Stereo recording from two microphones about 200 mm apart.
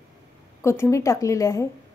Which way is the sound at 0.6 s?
15° left (ahead or behind).